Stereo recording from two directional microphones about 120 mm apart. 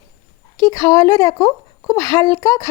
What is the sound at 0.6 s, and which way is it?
Speech, 30° left (ahead or behind).